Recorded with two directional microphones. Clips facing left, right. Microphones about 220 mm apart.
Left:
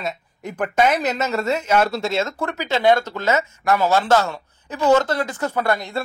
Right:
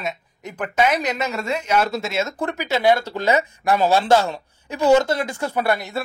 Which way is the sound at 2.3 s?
15° right (ahead or behind).